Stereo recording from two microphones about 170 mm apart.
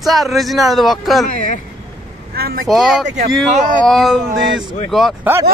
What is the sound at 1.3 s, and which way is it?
Speech, 45° left (ahead or behind).